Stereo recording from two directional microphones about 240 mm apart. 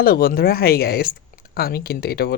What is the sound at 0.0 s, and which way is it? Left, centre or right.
Speech, left.